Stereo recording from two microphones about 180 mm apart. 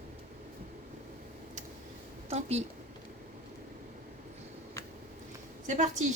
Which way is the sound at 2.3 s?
35° right (ahead or behind).